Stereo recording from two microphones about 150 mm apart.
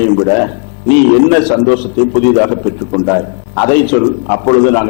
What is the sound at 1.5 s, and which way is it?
A man's voice, 25° left (ahead or behind).